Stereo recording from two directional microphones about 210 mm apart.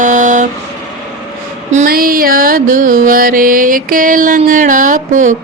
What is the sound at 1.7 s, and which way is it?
Music, 45° right (ahead or behind).